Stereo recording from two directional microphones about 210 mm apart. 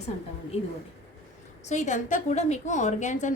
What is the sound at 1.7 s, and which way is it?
A woman's voice, 35° left (ahead or behind).